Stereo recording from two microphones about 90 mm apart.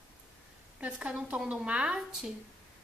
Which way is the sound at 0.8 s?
10° right (ahead or behind).